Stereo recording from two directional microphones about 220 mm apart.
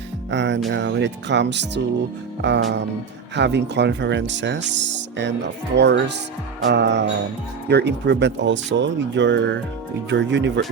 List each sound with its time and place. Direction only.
0.3 s speech: 55° right (ahead or behind)